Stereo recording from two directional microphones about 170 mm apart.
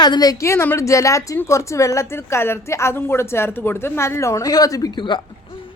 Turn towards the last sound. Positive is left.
turn(degrees=30)  # may be behind; listen again after turning